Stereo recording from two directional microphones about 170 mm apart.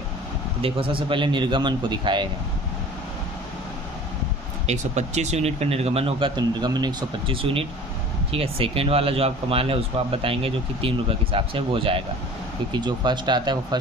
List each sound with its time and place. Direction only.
0.6 s a man's voice: 35° right (ahead or behind)
4.6 s a man's voice: 40° right (ahead or behind); by 13.7 s 25° right (ahead or behind)